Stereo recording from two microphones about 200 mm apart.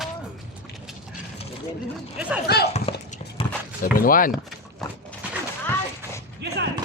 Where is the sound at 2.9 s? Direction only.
30° left (ahead or behind).